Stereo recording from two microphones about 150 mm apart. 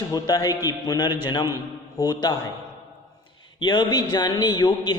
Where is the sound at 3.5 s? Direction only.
30° left (ahead or behind).